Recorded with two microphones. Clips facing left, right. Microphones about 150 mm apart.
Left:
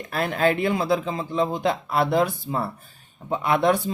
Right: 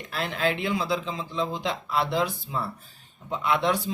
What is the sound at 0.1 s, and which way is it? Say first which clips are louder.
Speech: left 5 dB; 50° left (ahead or behind).